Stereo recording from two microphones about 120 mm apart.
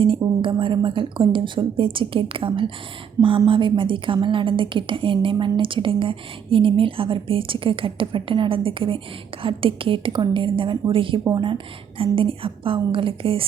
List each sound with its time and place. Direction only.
0.0 s a woman's voice: 45° right (ahead or behind)